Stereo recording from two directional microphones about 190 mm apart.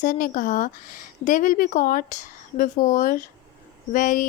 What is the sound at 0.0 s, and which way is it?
A woman's voice, 45° left (ahead or behind).